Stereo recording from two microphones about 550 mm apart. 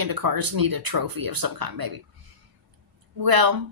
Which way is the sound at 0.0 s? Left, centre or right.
Right.